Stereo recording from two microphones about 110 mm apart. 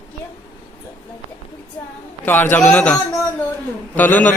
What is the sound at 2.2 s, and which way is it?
Speech, 20° left (ahead or behind).